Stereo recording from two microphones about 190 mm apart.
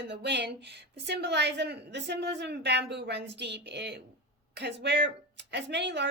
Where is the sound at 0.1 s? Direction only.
65° right (ahead or behind).